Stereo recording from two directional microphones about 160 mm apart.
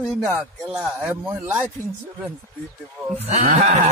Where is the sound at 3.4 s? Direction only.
55° right (ahead or behind).